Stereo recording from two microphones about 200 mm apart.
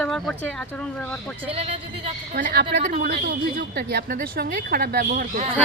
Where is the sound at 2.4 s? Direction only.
40° right (ahead or behind).